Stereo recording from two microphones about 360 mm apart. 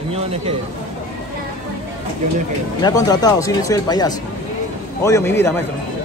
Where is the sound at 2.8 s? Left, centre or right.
Centre.